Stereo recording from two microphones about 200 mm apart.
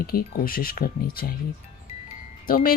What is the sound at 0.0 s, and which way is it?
A woman's voice, 45° left (ahead or behind).